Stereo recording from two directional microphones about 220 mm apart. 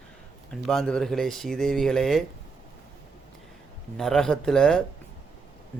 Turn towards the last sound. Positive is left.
turn(degrees=5)  # may be behind; listen again after turning